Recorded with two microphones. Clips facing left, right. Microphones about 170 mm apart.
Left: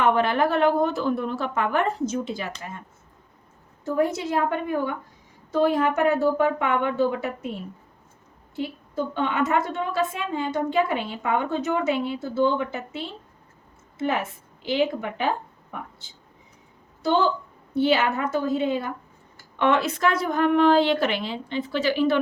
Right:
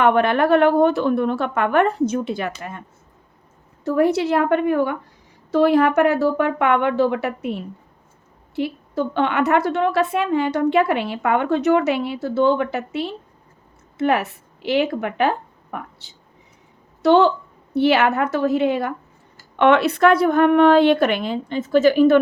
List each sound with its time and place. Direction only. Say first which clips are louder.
0.0 s a woman's voice: right 4 dB; 60° right (ahead or behind)
3.8 s a woman's voice: right 6 dB; 70° right (ahead or behind); by 22.2 s 50° right (ahead or behind)